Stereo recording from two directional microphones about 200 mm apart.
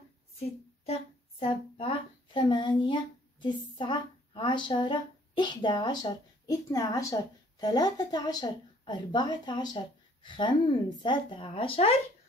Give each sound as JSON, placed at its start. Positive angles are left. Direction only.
{"t": 1.4, "sound": "speech", "side_deg": 25}